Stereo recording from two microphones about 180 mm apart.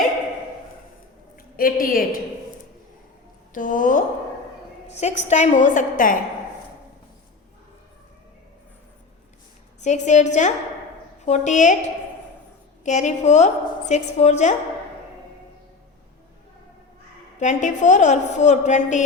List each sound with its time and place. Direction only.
1.5 s a woman's voice: 55° left (ahead or behind)
3.5 s a woman's voice: 50° left (ahead or behind)
9.8 s a woman's voice: 40° left (ahead or behind)
12.8 s a woman's voice: 40° left (ahead or behind)
17.4 s a woman's voice: 45° left (ahead or behind)